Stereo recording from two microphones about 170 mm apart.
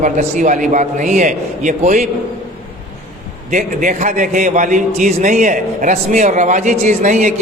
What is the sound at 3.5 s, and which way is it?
A man's voice, 50° right (ahead or behind).